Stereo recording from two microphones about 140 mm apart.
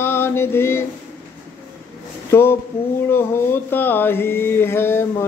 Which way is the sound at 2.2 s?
15° left (ahead or behind).